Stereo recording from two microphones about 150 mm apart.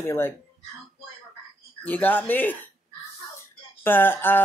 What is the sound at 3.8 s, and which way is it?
Speech, 15° left (ahead or behind).